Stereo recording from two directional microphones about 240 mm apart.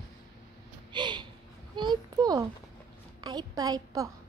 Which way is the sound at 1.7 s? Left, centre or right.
Centre.